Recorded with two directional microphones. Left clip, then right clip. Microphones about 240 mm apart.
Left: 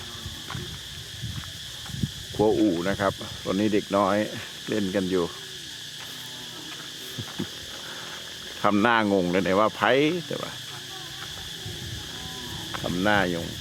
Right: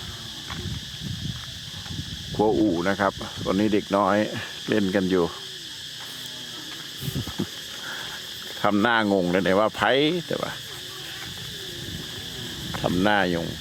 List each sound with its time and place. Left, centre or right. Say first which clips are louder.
2.4 s speech: right 1 dB; centre
8.6 s speech: even; centre
12.8 s speech: right 2 dB; right